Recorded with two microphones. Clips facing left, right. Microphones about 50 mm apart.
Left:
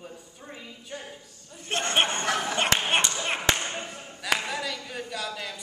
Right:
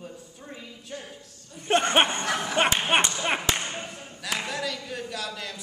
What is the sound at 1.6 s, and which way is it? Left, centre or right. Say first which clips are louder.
Speech: right 4 dB; right.